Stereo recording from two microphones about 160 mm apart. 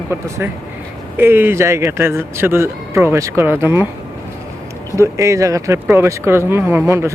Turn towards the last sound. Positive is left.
turn(degrees=-15)  # may be behind; listen again after turning